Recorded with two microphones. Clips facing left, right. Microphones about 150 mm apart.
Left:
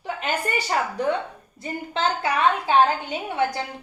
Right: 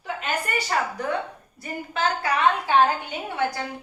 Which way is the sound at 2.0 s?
25° left (ahead or behind).